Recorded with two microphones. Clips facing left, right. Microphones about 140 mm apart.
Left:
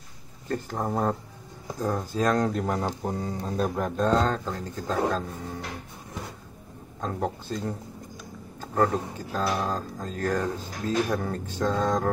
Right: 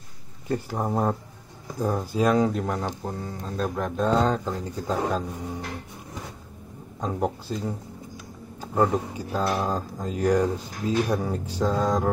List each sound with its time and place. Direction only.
0.5 s speech: 10° right (ahead or behind)
3.0 s speech: 15° left (ahead or behind); by 5.6 s 15° right (ahead or behind)
7.0 s speech: 10° right (ahead or behind)